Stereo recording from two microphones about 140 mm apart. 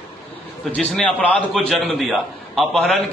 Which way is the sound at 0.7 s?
5° left (ahead or behind).